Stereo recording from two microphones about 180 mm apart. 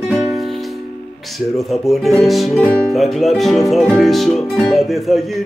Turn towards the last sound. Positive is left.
turn(degrees=0)  # may be behind; listen again after turning